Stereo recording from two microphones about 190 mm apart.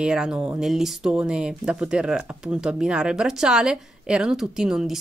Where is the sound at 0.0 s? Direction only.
5° right (ahead or behind).